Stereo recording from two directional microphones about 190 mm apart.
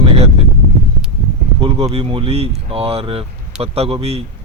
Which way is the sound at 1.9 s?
30° right (ahead or behind).